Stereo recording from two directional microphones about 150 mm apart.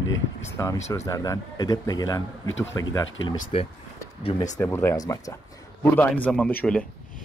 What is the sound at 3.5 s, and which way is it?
Speech, 40° left (ahead or behind).